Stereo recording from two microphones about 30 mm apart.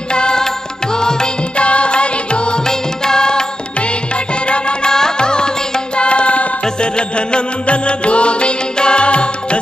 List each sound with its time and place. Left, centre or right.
0.1 s music: left
1.6 s music: left
3.1 s music: left
4.5 s music: left
4.9 s music: left
5.9 s music: left